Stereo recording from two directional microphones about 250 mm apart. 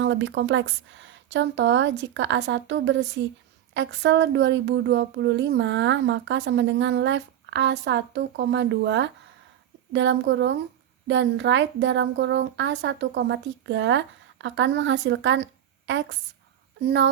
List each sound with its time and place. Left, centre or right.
0.0 s speech: right